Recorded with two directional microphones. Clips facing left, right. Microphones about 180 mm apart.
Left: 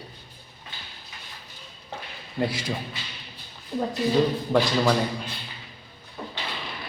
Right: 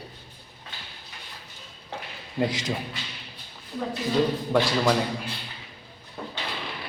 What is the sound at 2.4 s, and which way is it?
Speech, 20° right (ahead or behind).